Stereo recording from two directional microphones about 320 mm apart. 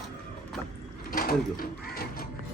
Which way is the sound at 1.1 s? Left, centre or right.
Left.